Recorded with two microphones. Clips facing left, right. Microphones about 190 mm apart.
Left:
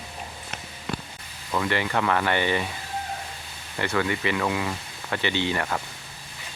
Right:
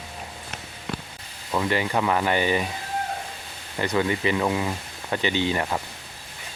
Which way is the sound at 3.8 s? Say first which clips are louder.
Right 2 dB; 15° right (ahead or behind).